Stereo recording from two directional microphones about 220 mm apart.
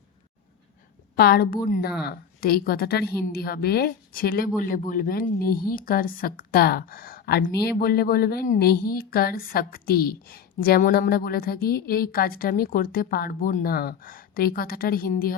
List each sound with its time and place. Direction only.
1.1 s a woman's voice: 45° left (ahead or behind)